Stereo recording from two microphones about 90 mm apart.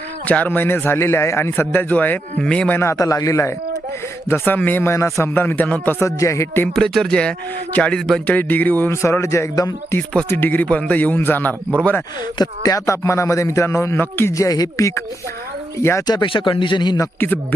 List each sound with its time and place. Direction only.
0.3 s a man's voice: 15° left (ahead or behind)
2.8 s speech: 35° left (ahead or behind)
4.3 s a man's voice: 20° left (ahead or behind)
6.1 s speech: 35° left (ahead or behind)
6.7 s speech: 5° left (ahead or behind)
8.3 s a man's voice: 20° left (ahead or behind)
12.4 s speech: 40° left (ahead or behind); by 14.3 s 25° left (ahead or behind)
14.3 s speech: 40° left (ahead or behind)
16.0 s a man's voice: 60° left (ahead or behind)
17.2 s a man's voice: 20° left (ahead or behind)